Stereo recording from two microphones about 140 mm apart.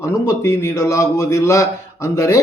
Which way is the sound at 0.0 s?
20° left (ahead or behind).